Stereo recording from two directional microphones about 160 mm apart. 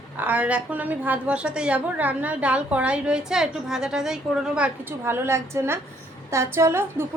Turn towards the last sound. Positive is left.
turn(degrees=-15)  # may be behind; listen again after turning